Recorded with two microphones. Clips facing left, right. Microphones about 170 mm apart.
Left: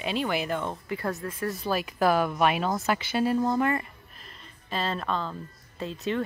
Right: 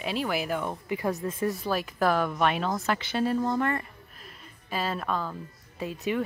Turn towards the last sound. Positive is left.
turn(degrees=-10)  # may be behind; listen again after turning